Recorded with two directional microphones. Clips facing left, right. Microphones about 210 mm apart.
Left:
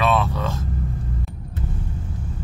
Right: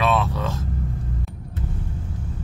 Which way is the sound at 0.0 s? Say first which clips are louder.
Left 1 dB; centre (ahead or behind).